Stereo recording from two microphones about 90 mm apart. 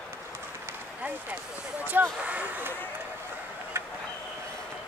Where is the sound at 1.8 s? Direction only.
20° right (ahead or behind).